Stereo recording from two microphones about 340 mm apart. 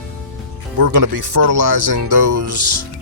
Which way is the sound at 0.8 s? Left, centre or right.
Right.